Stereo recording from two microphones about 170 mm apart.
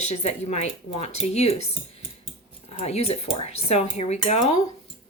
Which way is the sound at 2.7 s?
40° left (ahead or behind).